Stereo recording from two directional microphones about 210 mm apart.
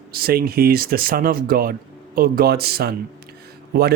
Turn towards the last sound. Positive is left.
turn(degrees=-45)  # may be behind; listen again after turning